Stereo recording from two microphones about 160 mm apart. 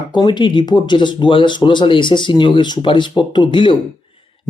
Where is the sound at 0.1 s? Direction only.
30° left (ahead or behind).